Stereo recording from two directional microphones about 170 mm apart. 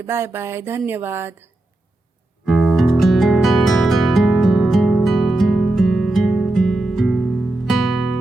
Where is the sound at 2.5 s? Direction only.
Centre (ahead or behind).